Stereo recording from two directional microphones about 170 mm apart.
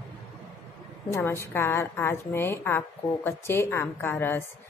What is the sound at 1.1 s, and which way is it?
A woman's voice, 15° left (ahead or behind).